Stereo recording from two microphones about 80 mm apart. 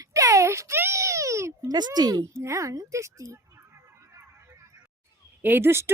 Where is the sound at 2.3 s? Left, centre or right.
Right.